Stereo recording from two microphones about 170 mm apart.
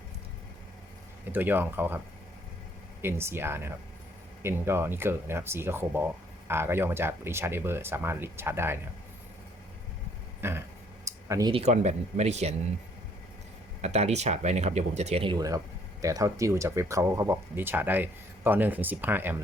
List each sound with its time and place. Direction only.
1.2 s speech: 10° right (ahead or behind)
3.0 s speech: 15° right (ahead or behind)
10.4 s speech: 15° right (ahead or behind)
11.0 s a sound: 20° right (ahead or behind)
11.5 s speech: 40° right (ahead or behind)
13.8 s speech: 40° right (ahead or behind); by 19.4 s 10° right (ahead or behind)